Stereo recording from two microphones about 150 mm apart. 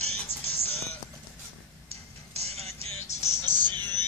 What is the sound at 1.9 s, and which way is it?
Music, 45° right (ahead or behind).